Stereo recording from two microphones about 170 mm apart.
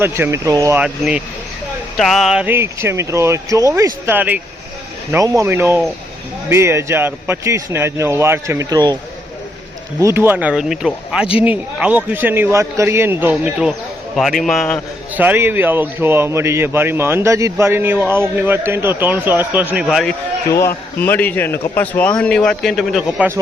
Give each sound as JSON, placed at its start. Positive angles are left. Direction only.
{"t": 0.0, "sound": "a man's voice", "side_deg": -15}
{"t": 0.8, "sound": "a man's voice", "side_deg": -5}
{"t": 10.0, "sound": "a man's voice", "side_deg": -15}
{"t": 15.1, "sound": "a man's voice", "side_deg": -10}
{"t": 20.5, "sound": "a man's voice", "side_deg": 15}